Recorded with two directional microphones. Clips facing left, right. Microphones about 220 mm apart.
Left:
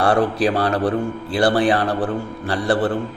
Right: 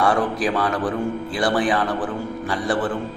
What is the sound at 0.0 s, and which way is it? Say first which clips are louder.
Speech: left 3 dB; 60° left (ahead or behind).